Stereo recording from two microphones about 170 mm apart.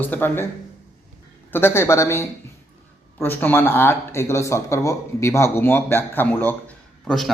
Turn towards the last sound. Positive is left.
turn(degrees=5)  # may be behind; listen again after turning